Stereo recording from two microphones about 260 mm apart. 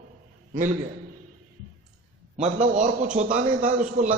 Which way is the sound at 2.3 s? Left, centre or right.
Right.